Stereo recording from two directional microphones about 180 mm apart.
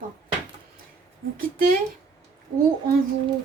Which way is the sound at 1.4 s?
55° right (ahead or behind).